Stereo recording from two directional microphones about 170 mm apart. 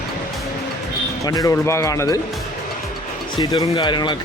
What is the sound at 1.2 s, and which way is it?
Speech, 20° left (ahead or behind).